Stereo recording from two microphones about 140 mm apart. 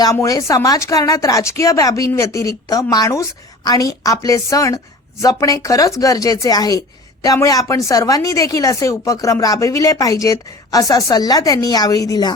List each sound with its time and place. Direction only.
0.0 s speech: 25° left (ahead or behind)